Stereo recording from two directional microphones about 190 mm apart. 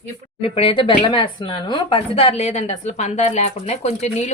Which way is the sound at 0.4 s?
30° left (ahead or behind).